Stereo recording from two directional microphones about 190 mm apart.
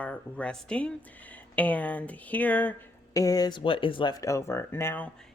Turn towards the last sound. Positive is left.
turn(degrees=10)  # may be behind; listen again after turning